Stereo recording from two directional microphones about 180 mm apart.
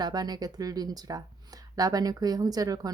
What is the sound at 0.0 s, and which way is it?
Speech, 20° right (ahead or behind).